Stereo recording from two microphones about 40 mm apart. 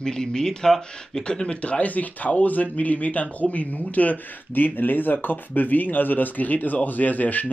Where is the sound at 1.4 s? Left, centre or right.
Left.